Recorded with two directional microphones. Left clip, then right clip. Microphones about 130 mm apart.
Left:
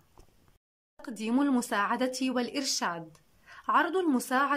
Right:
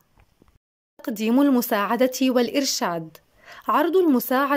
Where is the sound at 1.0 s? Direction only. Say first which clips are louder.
Right 9 dB; 25° right (ahead or behind).